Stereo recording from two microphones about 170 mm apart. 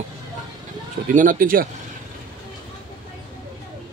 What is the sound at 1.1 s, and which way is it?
Speech, 55° right (ahead or behind).